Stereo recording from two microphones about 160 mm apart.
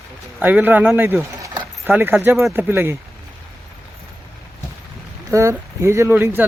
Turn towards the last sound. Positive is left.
turn(degrees=-15)  # may be behind; listen again after turning